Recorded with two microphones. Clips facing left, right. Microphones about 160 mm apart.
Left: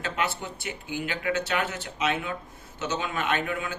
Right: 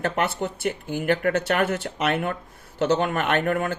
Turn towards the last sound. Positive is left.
turn(degrees=-55)  # may be behind; listen again after turning